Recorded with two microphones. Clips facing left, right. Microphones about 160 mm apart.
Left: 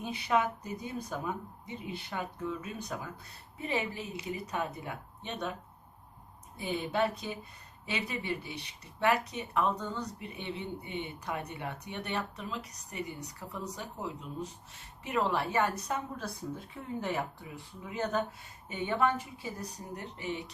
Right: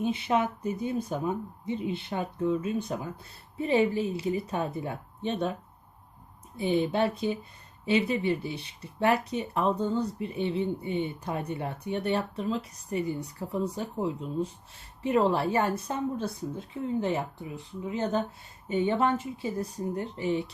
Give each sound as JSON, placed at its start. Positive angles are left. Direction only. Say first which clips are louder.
{"t": 0.0, "sound": "speech", "louder": "right 4 dB", "side_deg": -25}
{"t": 6.6, "sound": "speech", "louder": "right 6 dB", "side_deg": -25}